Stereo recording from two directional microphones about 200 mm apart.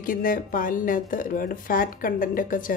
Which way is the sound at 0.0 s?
45° left (ahead or behind).